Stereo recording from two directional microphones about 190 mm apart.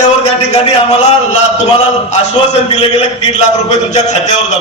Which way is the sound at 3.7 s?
35° left (ahead or behind).